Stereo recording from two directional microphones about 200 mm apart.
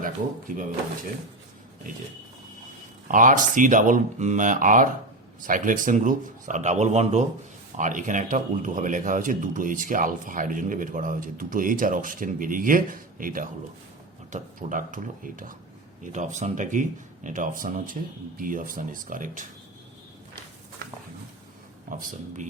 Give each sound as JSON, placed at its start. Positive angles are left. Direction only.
{"t": 0.0, "sound": "speech", "side_deg": -45}
{"t": 3.1, "sound": "speech", "side_deg": -40}
{"t": 21.8, "sound": "speech", "side_deg": -40}